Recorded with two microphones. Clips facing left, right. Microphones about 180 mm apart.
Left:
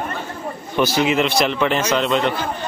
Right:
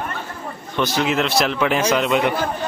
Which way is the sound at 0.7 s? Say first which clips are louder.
Left 2 dB; 5° left (ahead or behind).